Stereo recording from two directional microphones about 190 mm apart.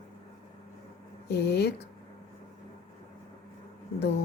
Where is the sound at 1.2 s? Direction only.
60° left (ahead or behind).